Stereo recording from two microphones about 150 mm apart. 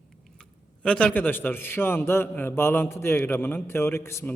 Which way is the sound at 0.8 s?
10° left (ahead or behind).